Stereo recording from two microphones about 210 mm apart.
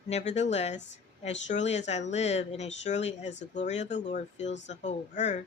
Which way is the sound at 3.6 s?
35° left (ahead or behind).